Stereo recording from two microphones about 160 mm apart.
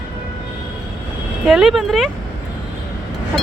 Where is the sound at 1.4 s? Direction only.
5° right (ahead or behind).